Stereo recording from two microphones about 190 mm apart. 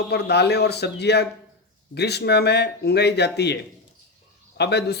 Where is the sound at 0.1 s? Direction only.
60° left (ahead or behind).